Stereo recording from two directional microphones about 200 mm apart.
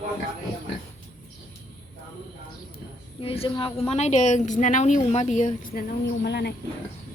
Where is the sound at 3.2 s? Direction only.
30° left (ahead or behind).